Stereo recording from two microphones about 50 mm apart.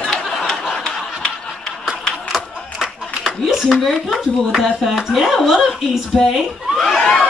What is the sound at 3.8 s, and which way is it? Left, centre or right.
Speech, centre.